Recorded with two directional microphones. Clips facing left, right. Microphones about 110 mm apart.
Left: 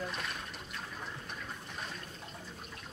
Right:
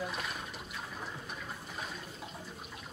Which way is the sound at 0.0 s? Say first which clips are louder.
Right 1 dB; 5° right (ahead or behind).